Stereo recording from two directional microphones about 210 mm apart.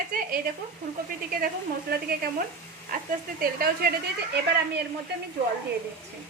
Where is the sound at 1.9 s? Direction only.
45° right (ahead or behind).